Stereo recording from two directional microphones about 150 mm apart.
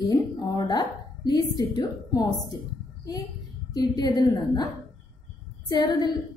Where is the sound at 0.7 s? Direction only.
30° left (ahead or behind).